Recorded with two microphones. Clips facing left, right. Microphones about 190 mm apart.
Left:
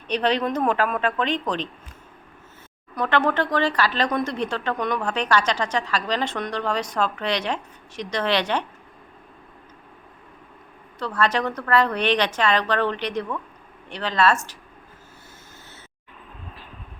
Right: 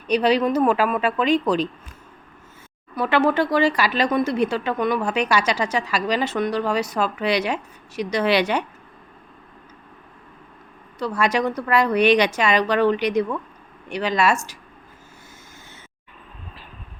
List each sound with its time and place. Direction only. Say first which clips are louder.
0.1 s speech: right 4 dB; 10° right (ahead or behind)
2.9 s speech: right 3 dB; 5° right (ahead or behind)
11.0 s speech: right 2 dB; 10° right (ahead or behind)